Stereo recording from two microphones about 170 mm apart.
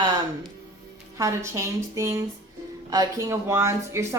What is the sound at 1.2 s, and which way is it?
A woman's voice, 15° right (ahead or behind).